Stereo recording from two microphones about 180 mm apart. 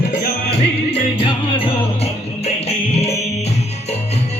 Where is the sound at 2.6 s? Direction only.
35° left (ahead or behind).